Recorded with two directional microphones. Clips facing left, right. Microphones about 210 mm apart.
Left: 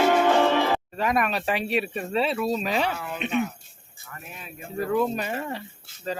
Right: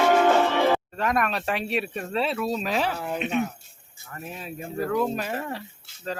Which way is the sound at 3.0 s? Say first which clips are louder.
Right 4 dB; 35° right (ahead or behind).